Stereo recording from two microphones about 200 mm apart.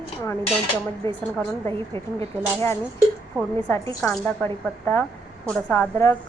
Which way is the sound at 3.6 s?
15° left (ahead or behind).